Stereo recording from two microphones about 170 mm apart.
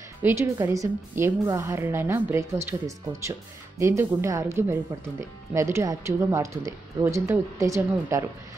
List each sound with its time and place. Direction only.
0.2 s a woman's voice: 15° right (ahead or behind)